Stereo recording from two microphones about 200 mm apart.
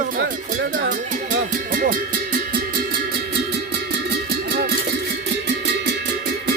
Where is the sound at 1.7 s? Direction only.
45° right (ahead or behind).